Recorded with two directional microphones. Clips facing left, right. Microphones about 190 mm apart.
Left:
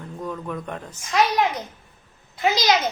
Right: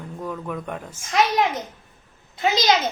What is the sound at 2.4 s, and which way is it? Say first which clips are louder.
Speech: even; 25° right (ahead or behind).